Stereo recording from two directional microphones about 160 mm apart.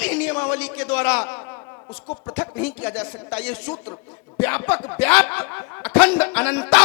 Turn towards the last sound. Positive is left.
turn(degrees=10)  # may be behind; listen again after turning